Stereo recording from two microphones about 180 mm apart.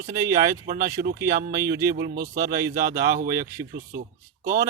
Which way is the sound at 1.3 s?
55° right (ahead or behind).